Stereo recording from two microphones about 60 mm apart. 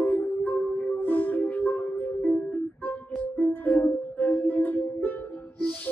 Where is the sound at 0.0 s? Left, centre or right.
Left.